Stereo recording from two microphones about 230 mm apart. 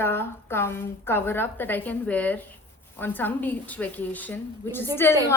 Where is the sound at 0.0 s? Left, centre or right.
Centre.